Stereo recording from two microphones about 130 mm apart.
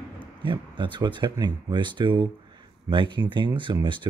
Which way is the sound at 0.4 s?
40° right (ahead or behind).